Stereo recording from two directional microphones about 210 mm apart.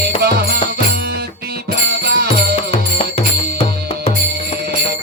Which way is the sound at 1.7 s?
45° right (ahead or behind).